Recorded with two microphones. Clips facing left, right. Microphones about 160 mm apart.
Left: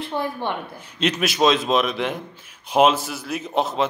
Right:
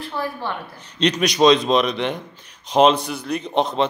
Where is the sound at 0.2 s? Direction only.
20° left (ahead or behind).